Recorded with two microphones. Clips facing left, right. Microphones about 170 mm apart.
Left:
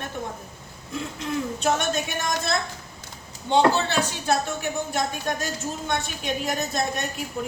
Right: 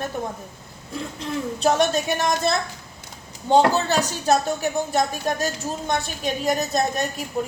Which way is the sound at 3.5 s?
40° right (ahead or behind).